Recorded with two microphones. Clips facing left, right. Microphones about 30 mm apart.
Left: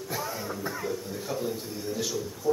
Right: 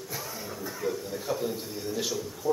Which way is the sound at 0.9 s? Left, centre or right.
Centre.